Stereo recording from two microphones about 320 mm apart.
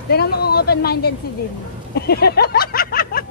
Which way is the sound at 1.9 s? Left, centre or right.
Left.